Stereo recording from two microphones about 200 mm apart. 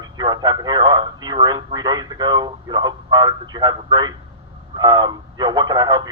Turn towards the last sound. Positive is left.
turn(degrees=-25)  # may be behind; listen again after turning